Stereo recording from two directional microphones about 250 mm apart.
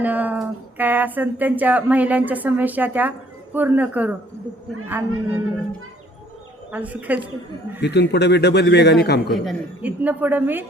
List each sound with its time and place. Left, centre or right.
0.0 s speech: centre
6.7 s speech: centre
7.8 s a man's voice: left
9.3 s speech: centre